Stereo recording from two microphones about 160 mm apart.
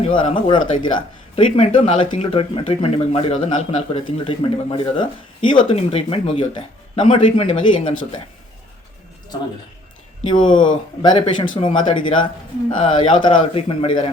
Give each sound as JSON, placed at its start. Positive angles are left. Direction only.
{"t": 0.0, "sound": "speech", "side_deg": 30}
{"t": 10.4, "sound": "speech", "side_deg": 30}